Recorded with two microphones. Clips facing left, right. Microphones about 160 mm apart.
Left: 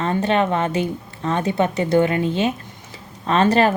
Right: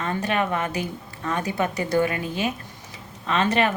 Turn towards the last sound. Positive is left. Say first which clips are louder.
# left 6 dB
turn(degrees=35)  # may be behind; listen again after turning